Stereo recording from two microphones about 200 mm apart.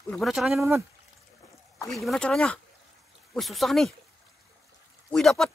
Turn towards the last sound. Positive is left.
turn(degrees=0)  # may be behind; listen again after turning